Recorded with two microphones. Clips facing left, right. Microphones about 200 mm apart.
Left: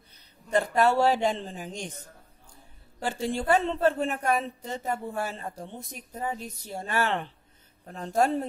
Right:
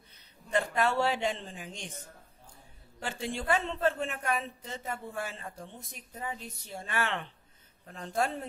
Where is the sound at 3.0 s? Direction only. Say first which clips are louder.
Left 6 dB; 40° left (ahead or behind).